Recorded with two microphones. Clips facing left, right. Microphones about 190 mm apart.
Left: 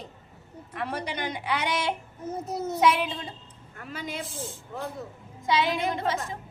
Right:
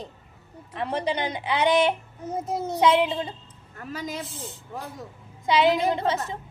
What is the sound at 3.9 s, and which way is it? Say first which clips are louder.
Speech: right 2 dB; 40° right (ahead or behind).